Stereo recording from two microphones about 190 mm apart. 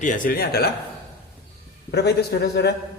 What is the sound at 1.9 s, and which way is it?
Speech, 60° left (ahead or behind).